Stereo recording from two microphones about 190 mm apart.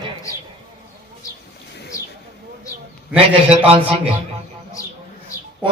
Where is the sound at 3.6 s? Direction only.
30° right (ahead or behind).